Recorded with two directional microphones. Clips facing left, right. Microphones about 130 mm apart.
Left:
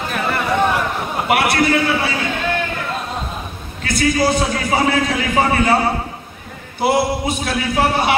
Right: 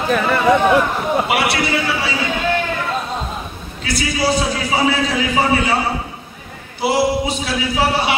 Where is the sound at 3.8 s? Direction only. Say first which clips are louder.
Left 2 dB; 50° left (ahead or behind).